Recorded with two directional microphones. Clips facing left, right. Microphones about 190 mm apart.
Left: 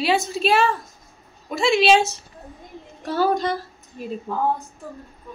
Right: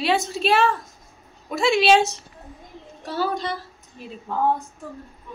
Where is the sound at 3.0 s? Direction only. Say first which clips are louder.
Left 5 dB; 45° left (ahead or behind).